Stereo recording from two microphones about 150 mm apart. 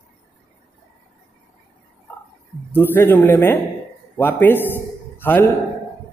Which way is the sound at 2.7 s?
15° left (ahead or behind).